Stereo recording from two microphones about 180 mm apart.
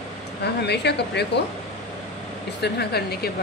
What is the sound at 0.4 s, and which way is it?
A woman's voice, 70° left (ahead or behind).